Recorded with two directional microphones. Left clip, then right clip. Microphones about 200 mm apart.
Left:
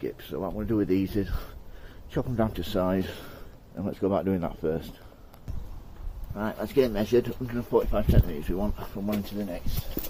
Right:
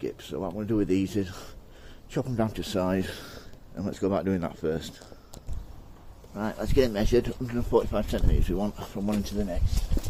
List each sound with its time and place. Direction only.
0.0 s speech: 10° right (ahead or behind)
6.3 s speech: 15° right (ahead or behind)
7.4 s speech: 30° right (ahead or behind)